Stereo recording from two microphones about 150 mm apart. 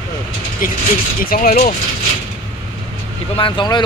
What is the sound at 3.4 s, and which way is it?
Speech, 35° left (ahead or behind).